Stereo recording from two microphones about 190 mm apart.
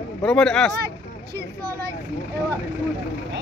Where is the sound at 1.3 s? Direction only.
55° right (ahead or behind).